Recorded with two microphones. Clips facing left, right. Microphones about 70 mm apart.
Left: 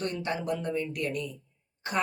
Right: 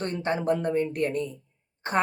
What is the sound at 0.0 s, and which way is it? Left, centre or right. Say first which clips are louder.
Speech: right 4 dB; right.